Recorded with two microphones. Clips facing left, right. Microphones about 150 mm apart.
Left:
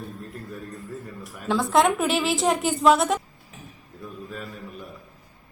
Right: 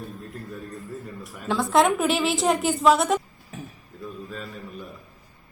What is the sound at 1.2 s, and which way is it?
A woman's voice, centre (ahead or behind).